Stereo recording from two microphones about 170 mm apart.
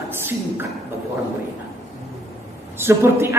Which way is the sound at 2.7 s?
15° right (ahead or behind).